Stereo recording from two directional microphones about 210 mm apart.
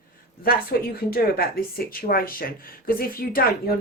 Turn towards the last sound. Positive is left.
turn(degrees=45)  # may be behind; listen again after turning